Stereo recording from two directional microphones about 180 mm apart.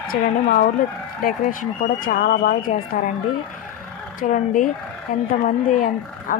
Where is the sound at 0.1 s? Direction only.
50° left (ahead or behind).